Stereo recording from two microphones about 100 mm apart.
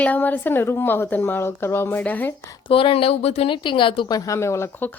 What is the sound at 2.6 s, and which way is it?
Speech, 60° left (ahead or behind).